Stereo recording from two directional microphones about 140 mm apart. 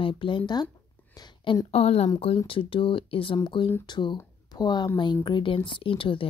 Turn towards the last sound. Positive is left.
turn(degrees=40)  # may be behind; listen again after turning